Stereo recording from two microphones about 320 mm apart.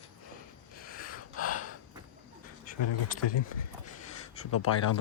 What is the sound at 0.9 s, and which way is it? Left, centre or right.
Gasp, left.